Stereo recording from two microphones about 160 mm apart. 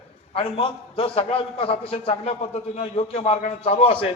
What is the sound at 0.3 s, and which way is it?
A man's voice, 35° left (ahead or behind).